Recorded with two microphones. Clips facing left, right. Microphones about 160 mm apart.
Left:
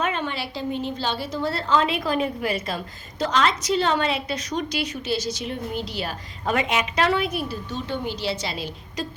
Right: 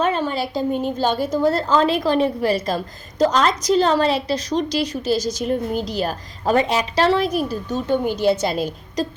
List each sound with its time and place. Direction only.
0.0 s a woman's voice: 35° right (ahead or behind)